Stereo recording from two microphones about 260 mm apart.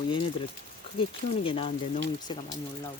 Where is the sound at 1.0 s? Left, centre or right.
Left.